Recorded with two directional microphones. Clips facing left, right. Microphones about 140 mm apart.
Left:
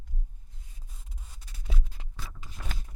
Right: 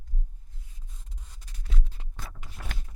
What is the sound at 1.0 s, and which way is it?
Rub, 5° left (ahead or behind).